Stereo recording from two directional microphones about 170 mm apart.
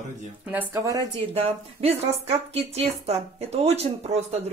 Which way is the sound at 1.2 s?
35° right (ahead or behind).